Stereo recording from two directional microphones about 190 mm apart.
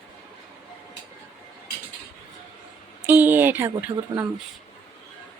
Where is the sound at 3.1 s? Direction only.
10° right (ahead or behind).